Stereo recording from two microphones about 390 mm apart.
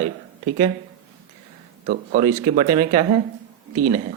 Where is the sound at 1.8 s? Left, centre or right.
Right.